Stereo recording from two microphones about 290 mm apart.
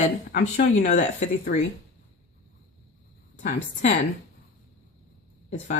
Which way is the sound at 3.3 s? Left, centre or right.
Left.